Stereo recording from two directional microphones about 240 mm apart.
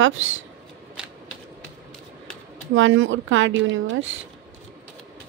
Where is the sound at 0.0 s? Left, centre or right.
Right.